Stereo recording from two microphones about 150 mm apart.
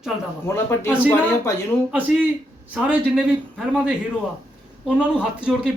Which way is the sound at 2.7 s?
5° right (ahead or behind).